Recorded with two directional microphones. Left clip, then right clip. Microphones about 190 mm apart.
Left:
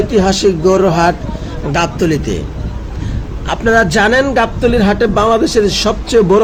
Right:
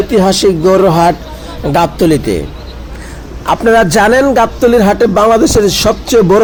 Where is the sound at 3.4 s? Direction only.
25° right (ahead or behind).